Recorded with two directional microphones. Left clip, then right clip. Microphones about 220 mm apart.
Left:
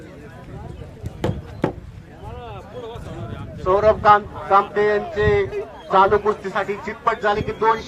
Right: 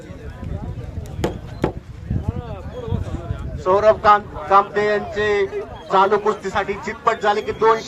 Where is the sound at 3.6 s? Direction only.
50° right (ahead or behind).